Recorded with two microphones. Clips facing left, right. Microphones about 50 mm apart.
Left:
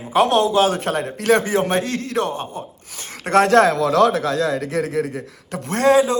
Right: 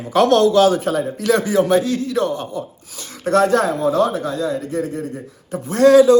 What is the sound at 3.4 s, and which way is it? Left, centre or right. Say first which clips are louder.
A man's voice: left 2 dB; left.